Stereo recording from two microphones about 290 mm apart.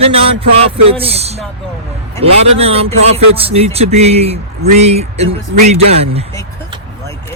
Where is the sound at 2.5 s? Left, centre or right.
Centre.